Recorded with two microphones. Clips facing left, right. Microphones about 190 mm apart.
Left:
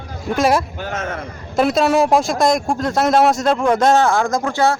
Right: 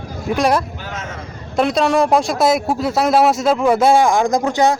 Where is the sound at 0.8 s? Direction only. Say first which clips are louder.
Left 5 dB; 50° left (ahead or behind).